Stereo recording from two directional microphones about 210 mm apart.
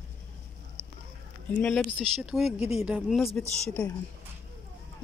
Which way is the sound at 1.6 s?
5° left (ahead or behind).